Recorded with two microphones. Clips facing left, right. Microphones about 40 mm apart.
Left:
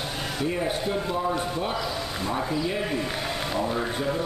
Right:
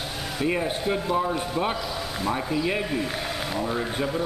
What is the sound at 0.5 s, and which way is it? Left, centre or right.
Speech, centre.